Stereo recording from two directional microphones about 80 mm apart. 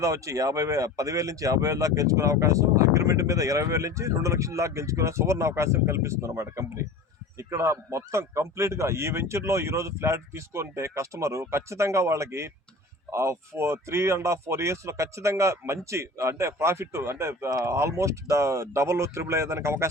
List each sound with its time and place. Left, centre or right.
0.0 s speech: right